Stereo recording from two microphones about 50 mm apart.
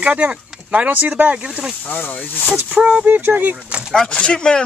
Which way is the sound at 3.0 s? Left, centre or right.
Right.